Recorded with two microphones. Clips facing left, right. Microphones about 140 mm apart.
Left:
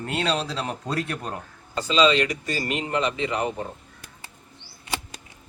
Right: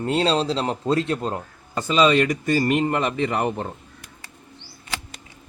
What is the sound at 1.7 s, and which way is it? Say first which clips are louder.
Speech: right 2 dB; 50° right (ahead or behind).